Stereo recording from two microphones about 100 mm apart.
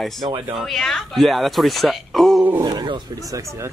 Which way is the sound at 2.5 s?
40° right (ahead or behind).